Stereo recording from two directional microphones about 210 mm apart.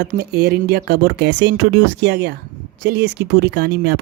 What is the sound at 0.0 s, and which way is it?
Speech, 50° right (ahead or behind).